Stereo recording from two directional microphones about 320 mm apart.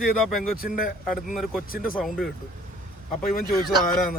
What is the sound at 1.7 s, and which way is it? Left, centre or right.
Speech, left.